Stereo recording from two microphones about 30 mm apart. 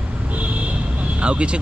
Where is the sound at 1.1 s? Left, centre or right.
Right.